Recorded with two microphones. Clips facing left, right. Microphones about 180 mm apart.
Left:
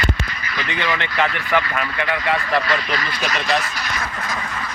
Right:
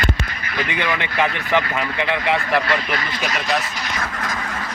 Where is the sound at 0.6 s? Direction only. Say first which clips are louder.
Even; 15° right (ahead or behind).